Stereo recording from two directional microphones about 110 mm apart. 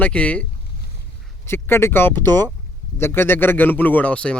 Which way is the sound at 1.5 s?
20° left (ahead or behind).